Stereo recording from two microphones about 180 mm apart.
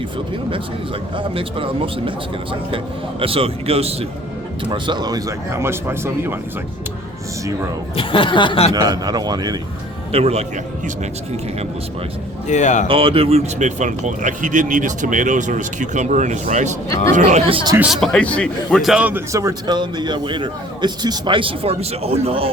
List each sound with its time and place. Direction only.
1.1 s a man's voice: 30° right (ahead or behind); by 6.3 s 15° right (ahead or behind)
7.9 s speech: 30° left (ahead or behind)
8.7 s a man's voice: 20° right (ahead or behind)
10.1 s speech: 35° right (ahead or behind)
12.5 s speech: 40° left (ahead or behind)
12.9 s speech: 30° right (ahead or behind)
17.7 s a man's voice: 5° right (ahead or behind); by 22.4 s 35° right (ahead or behind)